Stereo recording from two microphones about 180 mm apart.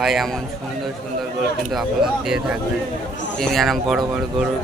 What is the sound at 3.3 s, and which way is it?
A man's voice, centre (ahead or behind).